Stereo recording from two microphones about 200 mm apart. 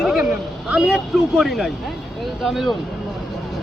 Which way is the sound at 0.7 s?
Centre (ahead or behind).